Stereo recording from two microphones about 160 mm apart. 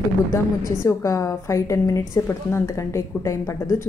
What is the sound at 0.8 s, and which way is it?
A woman's voice, 20° left (ahead or behind).